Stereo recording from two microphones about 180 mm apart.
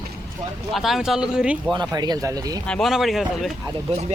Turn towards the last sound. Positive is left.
turn(degrees=-35)  # may be behind; listen again after turning